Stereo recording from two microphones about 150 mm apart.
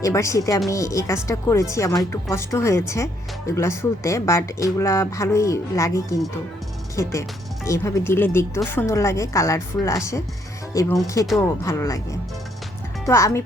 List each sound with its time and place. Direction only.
0.0 s speech: 20° left (ahead or behind)
13.1 s speech: 20° left (ahead or behind)